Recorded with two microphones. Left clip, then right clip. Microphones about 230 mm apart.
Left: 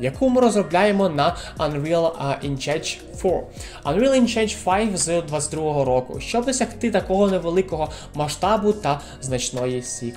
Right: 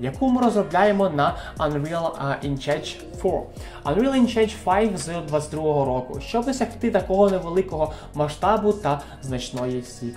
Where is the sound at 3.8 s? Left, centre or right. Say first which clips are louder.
Left 3 dB; left.